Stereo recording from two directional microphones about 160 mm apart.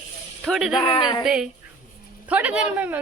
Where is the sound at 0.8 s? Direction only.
35° left (ahead or behind).